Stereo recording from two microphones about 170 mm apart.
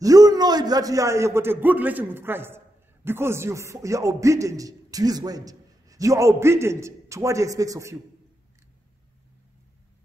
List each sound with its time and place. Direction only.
0.0 s a man's voice: 20° right (ahead or behind)